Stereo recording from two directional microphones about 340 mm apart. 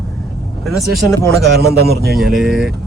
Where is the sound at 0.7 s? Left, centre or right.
Centre.